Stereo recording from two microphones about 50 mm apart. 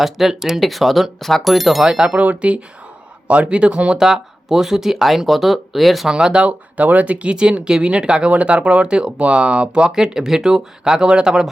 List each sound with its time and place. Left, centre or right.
0.0 s speech: centre
1.9 s speech: centre
3.9 s speech: centre
6.1 s speech: centre
6.4 s speech: right